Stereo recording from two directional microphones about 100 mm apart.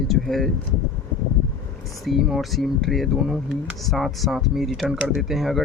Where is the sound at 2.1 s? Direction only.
5° right (ahead or behind).